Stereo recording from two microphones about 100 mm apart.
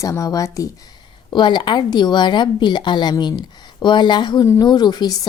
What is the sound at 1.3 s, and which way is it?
A woman's voice, 50° left (ahead or behind).